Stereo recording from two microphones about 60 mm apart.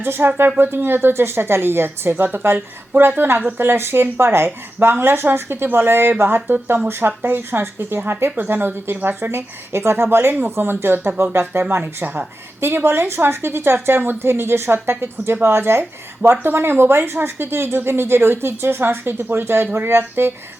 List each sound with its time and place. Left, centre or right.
0.0 s speech: right